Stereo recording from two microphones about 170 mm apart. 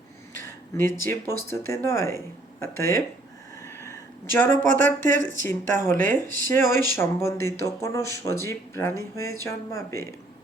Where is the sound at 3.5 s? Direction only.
15° left (ahead or behind).